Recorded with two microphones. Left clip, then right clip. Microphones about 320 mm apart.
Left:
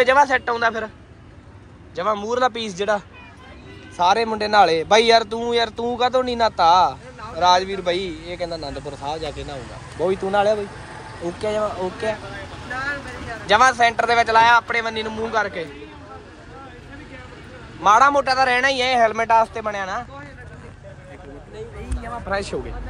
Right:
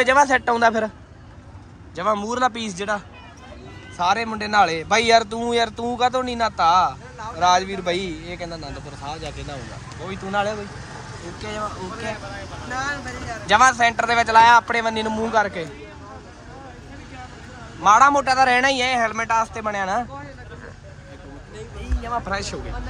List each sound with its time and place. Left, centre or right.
0.0 s a man's voice: centre
2.0 s a man's voice: centre
13.5 s a man's voice: centre
17.8 s a man's voice: centre
22.3 s speech: centre